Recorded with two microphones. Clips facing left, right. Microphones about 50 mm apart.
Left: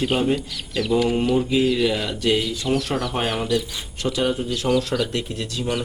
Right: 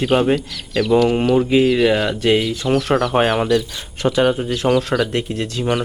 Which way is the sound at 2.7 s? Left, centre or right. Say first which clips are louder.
Right 4 dB; centre.